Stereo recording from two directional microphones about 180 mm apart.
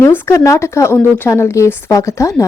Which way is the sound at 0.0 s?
10° left (ahead or behind).